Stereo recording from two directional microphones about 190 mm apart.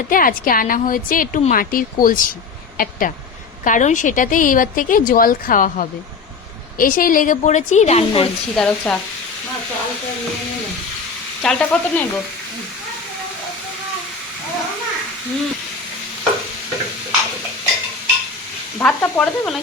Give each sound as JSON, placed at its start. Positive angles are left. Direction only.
{"t": 0.1, "sound": "a woman's voice", "side_deg": 45}
{"t": 8.5, "sound": "stir", "side_deg": 5}
{"t": 11.4, "sound": "frying", "side_deg": 5}
{"t": 18.8, "sound": "stir", "side_deg": 5}